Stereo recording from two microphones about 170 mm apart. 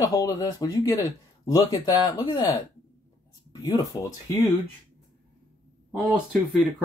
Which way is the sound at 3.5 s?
20° left (ahead or behind).